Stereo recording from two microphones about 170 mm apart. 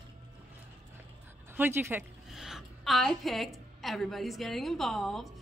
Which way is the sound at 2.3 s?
5° right (ahead or behind).